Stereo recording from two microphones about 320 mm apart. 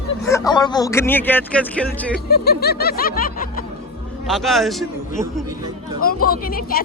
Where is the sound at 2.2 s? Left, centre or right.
Left.